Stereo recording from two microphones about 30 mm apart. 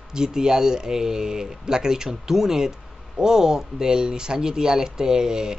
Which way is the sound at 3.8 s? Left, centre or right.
Right.